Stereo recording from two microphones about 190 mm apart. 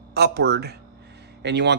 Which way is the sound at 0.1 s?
60° right (ahead or behind).